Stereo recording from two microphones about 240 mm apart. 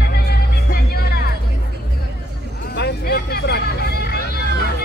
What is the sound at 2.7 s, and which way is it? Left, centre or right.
Hubbub, left.